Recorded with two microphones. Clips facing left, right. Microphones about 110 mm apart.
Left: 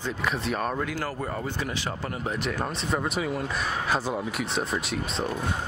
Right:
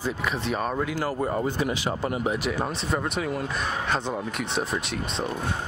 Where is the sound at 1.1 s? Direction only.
20° right (ahead or behind); by 5.5 s centre (ahead or behind).